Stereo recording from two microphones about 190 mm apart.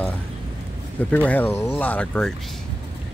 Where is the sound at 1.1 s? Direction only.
10° left (ahead or behind).